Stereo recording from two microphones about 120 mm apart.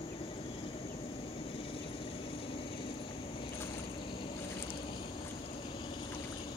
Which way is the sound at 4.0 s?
45° left (ahead or behind).